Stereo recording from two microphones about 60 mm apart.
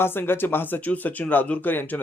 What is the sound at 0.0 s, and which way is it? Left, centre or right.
Speech, left.